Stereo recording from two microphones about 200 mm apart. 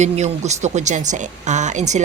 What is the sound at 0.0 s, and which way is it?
Speech, 35° right (ahead or behind).